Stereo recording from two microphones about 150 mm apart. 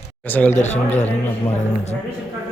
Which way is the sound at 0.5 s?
50° left (ahead or behind).